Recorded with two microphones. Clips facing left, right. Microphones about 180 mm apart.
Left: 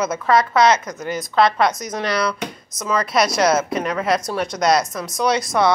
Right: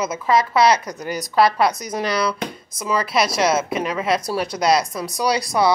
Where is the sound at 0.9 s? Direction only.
40° right (ahead or behind).